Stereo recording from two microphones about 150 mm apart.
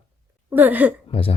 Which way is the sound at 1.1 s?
40° left (ahead or behind).